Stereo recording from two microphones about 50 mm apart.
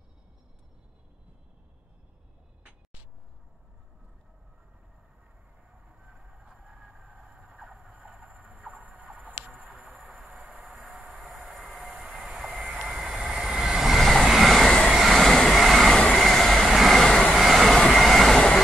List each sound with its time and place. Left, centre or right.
2.6 s a sound: right
5.7 s train: centre
6.1 s vehicle: centre
7.9 s train: centre
8.7 s a sound: centre
9.8 s train: centre
10.4 s a sound: centre
11.8 s train: right
12.8 s train: centre
15.5 s vehicle: centre
16.1 s train: centre
16.7 s vehicle: centre
17.4 s train: centre